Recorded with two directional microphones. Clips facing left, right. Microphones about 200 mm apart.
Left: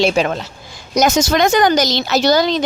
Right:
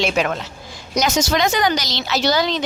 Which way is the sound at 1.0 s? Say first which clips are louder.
Left 5 dB; 50° left (ahead or behind).